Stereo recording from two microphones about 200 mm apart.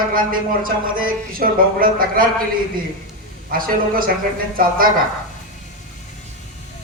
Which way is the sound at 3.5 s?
45° right (ahead or behind).